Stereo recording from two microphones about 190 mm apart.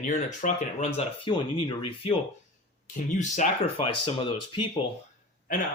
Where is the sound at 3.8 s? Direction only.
25° left (ahead or behind).